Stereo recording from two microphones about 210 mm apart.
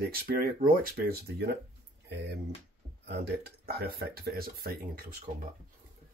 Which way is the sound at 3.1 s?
50° right (ahead or behind).